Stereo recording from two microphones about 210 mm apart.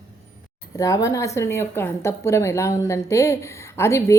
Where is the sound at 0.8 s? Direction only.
15° left (ahead or behind).